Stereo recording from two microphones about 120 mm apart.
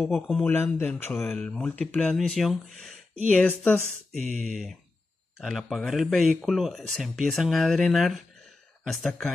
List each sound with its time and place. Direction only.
0.0 s speech: 5° right (ahead or behind)
0.4 s speech: 20° left (ahead or behind); by 2.9 s centre (ahead or behind)
3.3 s speech: 15° left (ahead or behind)
5.4 s speech: centre (ahead or behind)